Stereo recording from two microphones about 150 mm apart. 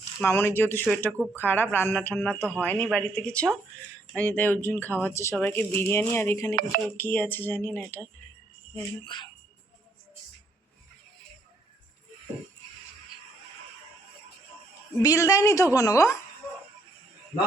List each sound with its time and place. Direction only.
0.3 s speech: 15° left (ahead or behind)
2.6 s speech: 10° left (ahead or behind)
8.7 s speech: 30° left (ahead or behind)
15.0 s a woman's voice: 25° left (ahead or behind)